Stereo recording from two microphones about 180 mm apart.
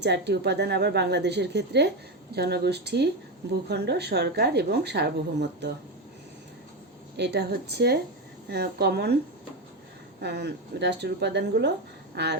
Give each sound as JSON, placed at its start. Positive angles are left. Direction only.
{"t": 0.0, "sound": "speech", "side_deg": -70}
{"t": 7.2, "sound": "speech", "side_deg": -65}
{"t": 10.2, "sound": "speech", "side_deg": -70}